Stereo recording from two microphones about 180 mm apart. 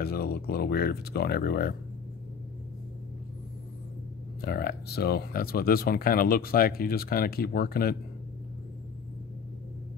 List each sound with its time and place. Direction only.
0.0 s speech: 60° left (ahead or behind)
4.4 s speech: 60° left (ahead or behind)